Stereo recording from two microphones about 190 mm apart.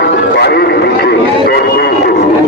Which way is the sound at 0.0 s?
60° left (ahead or behind).